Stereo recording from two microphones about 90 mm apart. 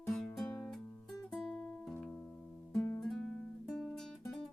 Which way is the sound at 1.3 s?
5° left (ahead or behind).